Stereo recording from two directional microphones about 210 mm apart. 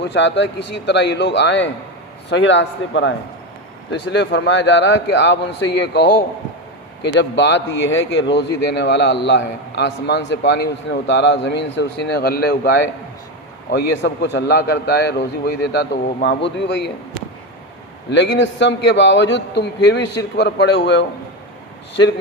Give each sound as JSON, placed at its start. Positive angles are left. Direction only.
{"t": 0.0, "sound": "a man's voice", "side_deg": 60}
{"t": 18.1, "sound": "speech", "side_deg": 60}